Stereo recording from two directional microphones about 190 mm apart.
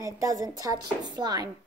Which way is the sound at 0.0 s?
15° right (ahead or behind).